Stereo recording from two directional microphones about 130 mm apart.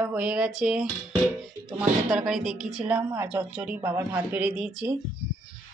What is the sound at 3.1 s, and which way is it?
A woman's voice, 20° right (ahead or behind).